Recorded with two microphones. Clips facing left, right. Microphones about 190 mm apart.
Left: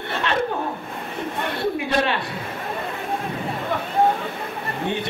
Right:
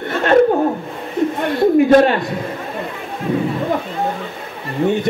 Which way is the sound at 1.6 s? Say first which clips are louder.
Right 13 dB; 45° right (ahead or behind).